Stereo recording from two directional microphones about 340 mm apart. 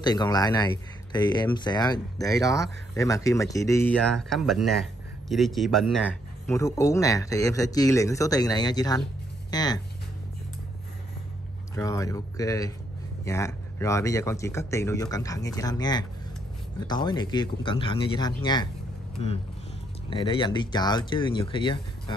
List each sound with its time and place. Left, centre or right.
0.0 s speech: centre
11.7 s speech: centre